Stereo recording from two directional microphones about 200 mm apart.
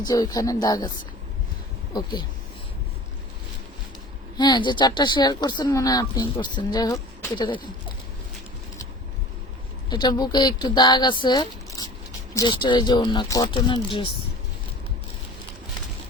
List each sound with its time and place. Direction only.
0.0 s speech: 20° left (ahead or behind)
1.9 s speech: 20° left (ahead or behind)
4.4 s speech: 20° left (ahead or behind)
9.9 s speech: 20° left (ahead or behind)